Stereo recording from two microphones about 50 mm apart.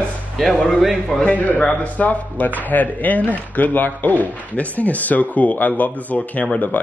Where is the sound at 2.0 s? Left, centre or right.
Left.